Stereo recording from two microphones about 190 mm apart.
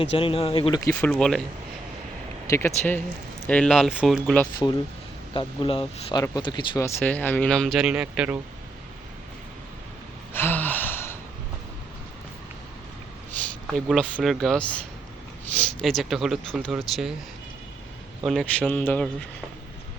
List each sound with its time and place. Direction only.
0.0 s speech: 30° left (ahead or behind)
0.9 s speech: 5° left (ahead or behind)
2.5 s speech: 15° left (ahead or behind)
5.3 s speech: 25° left (ahead or behind); by 8.4 s 5° right (ahead or behind)
10.3 s gasp: 10° left (ahead or behind)
13.7 s speech: centre (ahead or behind)
18.3 s speech: centre (ahead or behind)